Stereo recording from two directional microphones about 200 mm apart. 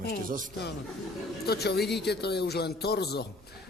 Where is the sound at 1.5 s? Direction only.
55° left (ahead or behind).